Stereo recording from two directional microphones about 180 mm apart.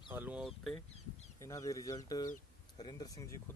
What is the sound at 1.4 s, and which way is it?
Speech, 20° left (ahead or behind).